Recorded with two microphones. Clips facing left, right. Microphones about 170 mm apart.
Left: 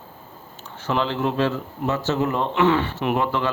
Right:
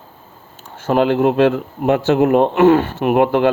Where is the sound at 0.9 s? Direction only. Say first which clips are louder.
Right 9 dB; 50° right (ahead or behind).